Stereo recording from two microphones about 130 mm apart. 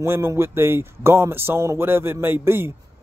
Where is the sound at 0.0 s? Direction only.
20° right (ahead or behind).